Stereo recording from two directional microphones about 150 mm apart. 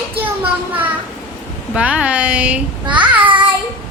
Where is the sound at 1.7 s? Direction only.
10° right (ahead or behind).